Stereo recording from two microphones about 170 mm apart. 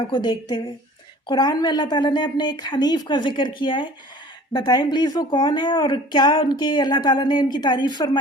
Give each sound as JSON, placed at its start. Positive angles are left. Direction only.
{"t": 0.1, "sound": "speech", "side_deg": 25}